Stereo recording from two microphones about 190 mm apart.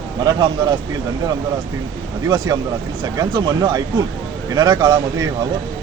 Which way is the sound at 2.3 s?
20° right (ahead or behind).